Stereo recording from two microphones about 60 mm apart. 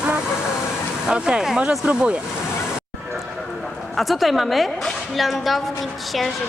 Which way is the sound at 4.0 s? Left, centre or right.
Centre.